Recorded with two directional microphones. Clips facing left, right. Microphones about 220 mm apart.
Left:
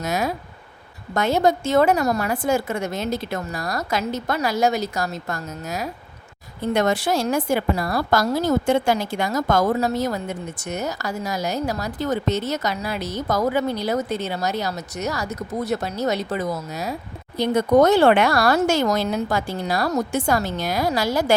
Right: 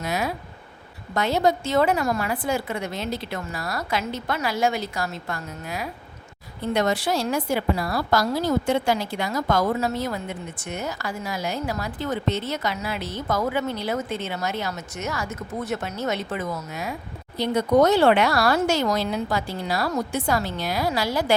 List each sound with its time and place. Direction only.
0.0 s a woman's voice: 45° left (ahead or behind)